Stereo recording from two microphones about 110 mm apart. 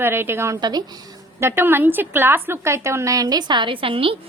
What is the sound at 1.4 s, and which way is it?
A woman's voice, 20° right (ahead or behind).